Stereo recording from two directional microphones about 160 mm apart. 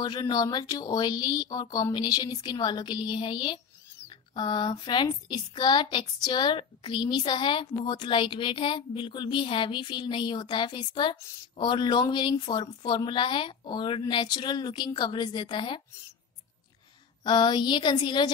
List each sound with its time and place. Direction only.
0.0 s a woman's voice: 25° left (ahead or behind)
17.2 s a woman's voice: 30° left (ahead or behind)